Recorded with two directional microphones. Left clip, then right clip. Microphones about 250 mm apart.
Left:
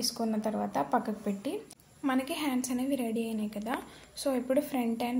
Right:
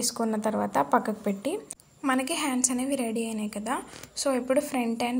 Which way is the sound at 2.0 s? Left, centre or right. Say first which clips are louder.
Right 4 dB; centre.